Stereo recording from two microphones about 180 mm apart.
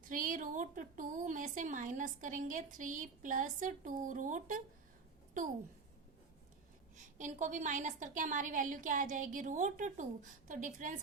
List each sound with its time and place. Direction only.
0.1 s a woman's voice: 50° right (ahead or behind)
6.9 s a woman's voice: 45° right (ahead or behind)